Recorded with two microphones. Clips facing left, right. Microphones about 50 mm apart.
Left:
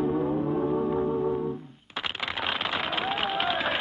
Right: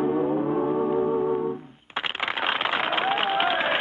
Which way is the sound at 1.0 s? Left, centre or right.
Centre.